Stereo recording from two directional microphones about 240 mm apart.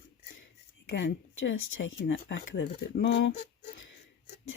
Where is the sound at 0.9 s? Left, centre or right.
Left.